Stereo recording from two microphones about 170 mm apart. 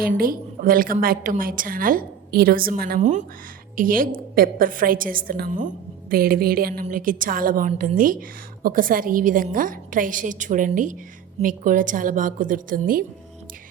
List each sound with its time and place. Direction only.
0.0 s a woman's voice: 60° right (ahead or behind)